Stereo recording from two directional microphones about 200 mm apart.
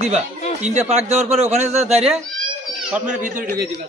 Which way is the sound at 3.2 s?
40° right (ahead or behind).